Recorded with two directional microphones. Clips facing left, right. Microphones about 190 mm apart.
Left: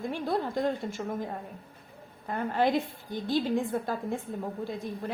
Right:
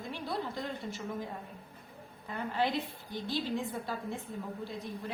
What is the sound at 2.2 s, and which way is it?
A woman's voice, 50° left (ahead or behind).